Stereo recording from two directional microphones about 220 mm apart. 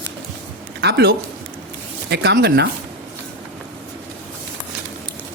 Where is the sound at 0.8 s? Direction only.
50° right (ahead or behind).